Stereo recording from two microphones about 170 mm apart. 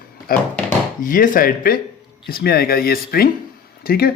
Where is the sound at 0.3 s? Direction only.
60° left (ahead or behind).